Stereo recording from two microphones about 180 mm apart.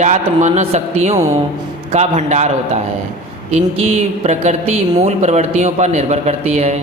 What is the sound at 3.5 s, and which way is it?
A man's voice, 35° right (ahead or behind).